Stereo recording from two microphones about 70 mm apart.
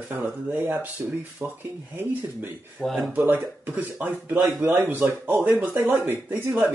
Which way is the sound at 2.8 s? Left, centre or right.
Centre.